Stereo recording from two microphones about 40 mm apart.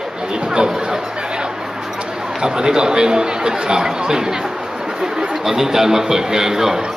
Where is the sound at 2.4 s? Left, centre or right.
Centre.